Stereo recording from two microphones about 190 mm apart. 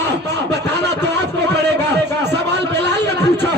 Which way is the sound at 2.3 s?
60° right (ahead or behind).